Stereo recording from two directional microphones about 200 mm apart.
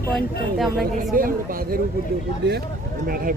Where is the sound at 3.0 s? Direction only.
45° right (ahead or behind).